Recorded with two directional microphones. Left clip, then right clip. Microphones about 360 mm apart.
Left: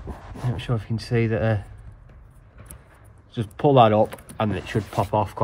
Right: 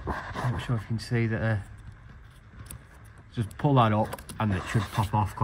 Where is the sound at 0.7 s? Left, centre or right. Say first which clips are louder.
Left 6 dB; left.